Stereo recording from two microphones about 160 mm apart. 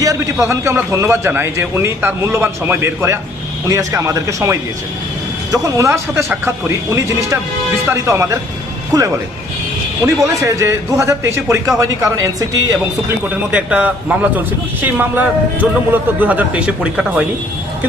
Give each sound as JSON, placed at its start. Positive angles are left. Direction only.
{"t": 0.0, "sound": "a man's voice", "side_deg": -20}
{"t": 5.6, "sound": "a man's voice", "side_deg": -20}
{"t": 10.2, "sound": "a man's voice", "side_deg": -20}
{"t": 13.5, "sound": "a man's voice", "side_deg": -10}